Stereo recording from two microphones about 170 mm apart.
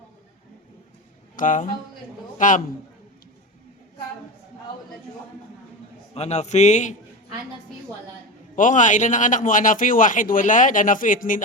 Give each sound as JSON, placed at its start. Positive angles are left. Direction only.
{"t": 1.4, "sound": "a man's voice", "side_deg": 50}
{"t": 6.1, "sound": "a man's voice", "side_deg": 40}
{"t": 8.5, "sound": "a man's voice", "side_deg": 50}